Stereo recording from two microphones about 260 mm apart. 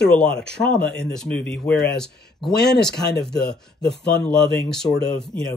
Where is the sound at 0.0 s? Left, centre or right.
Centre.